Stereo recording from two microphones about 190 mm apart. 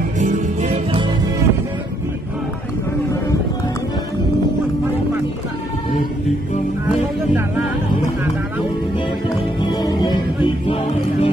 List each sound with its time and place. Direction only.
0.2 s music: 40° right (ahead or behind)
9.6 s music: 20° left (ahead or behind)